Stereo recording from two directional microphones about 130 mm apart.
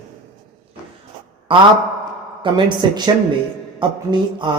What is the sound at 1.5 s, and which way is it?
Speech, 40° right (ahead or behind).